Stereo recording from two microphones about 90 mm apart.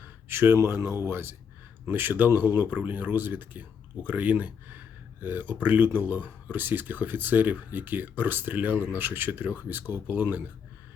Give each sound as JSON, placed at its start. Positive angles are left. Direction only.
{"t": 0.3, "sound": "speech", "side_deg": -25}